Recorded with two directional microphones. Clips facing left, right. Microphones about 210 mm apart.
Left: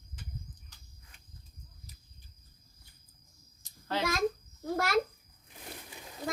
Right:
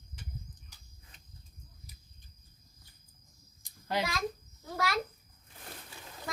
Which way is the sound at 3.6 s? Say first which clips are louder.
Right 1 dB; 15° right (ahead or behind).